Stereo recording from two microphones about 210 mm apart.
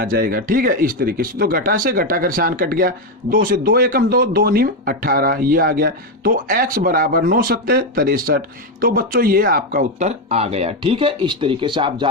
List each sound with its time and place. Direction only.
0.0 s speech: 40° right (ahead or behind); by 12.0 s 20° right (ahead or behind)